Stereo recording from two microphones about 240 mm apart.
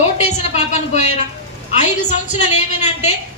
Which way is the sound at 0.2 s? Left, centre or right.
Left.